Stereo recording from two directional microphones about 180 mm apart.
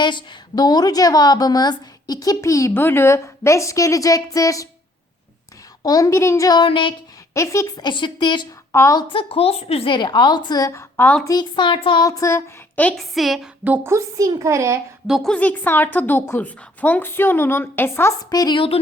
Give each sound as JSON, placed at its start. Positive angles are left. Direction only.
{"t": 0.0, "sound": "a woman's voice", "side_deg": 25}
{"t": 5.8, "sound": "a woman's voice", "side_deg": 20}
{"t": 7.3, "sound": "a woman's voice", "side_deg": 15}
{"t": 11.3, "sound": "a woman's voice", "side_deg": 25}
{"t": 13.8, "sound": "a child's voice", "side_deg": -15}
{"t": 15.0, "sound": "a woman's voice", "side_deg": 0}